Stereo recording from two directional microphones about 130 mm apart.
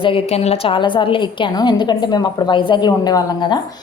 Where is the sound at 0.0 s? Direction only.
45° left (ahead or behind).